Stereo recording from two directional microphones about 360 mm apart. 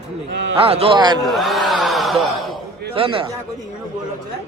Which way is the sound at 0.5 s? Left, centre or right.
Centre.